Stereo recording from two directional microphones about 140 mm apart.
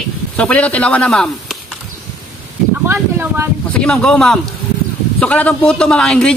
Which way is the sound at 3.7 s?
10° left (ahead or behind).